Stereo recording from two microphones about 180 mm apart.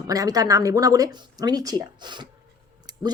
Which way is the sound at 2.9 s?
20° right (ahead or behind).